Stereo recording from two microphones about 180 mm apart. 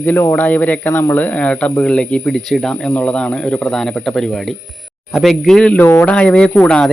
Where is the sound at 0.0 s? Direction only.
10° left (ahead or behind).